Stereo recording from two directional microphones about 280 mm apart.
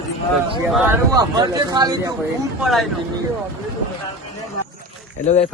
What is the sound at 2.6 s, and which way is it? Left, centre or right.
Speech, centre.